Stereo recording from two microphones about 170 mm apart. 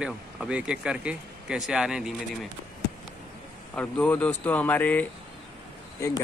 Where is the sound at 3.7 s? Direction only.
10° left (ahead or behind).